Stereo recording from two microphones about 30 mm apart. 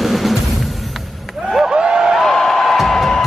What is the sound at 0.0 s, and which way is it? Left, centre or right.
Music, centre.